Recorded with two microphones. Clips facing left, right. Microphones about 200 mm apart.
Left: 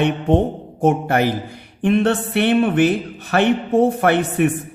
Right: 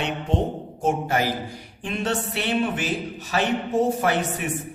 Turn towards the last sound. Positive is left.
turn(degrees=60)  # may be behind; listen again after turning